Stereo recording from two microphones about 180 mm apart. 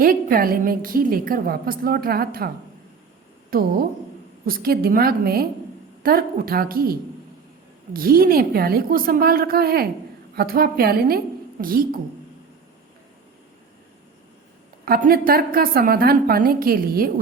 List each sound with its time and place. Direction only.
0.0 s a woman's voice: 50° right (ahead or behind)
3.5 s a woman's voice: 55° right (ahead or behind)
11.6 s a woman's voice: 45° right (ahead or behind)
14.8 s a woman's voice: 55° right (ahead or behind)